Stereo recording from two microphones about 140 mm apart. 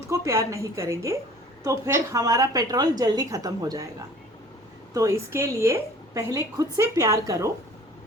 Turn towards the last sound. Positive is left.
turn(degrees=-20)  # may be behind; listen again after turning